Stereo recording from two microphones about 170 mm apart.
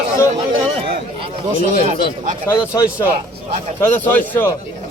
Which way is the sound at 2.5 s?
15° left (ahead or behind).